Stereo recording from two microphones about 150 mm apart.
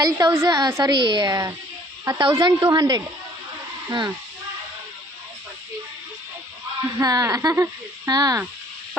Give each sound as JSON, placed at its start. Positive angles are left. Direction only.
{"t": 0.0, "sound": "a woman's voice", "side_deg": -25}
{"t": 7.0, "sound": "a woman's voice", "side_deg": -25}